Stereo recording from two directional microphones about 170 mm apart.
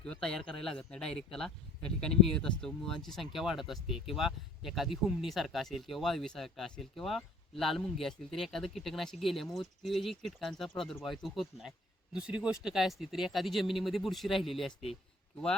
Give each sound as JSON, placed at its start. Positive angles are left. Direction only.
{"t": 0.0, "sound": "speech", "side_deg": 5}